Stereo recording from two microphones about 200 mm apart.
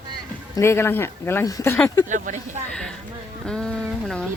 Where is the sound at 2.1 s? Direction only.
40° right (ahead or behind).